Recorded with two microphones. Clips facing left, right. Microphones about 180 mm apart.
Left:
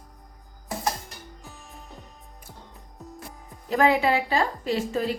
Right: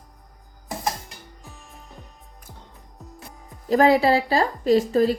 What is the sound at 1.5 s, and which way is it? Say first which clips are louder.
Music: even; centre (ahead or behind).